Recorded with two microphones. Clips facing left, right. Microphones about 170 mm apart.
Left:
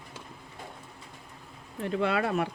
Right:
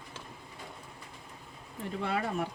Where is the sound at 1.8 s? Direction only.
80° left.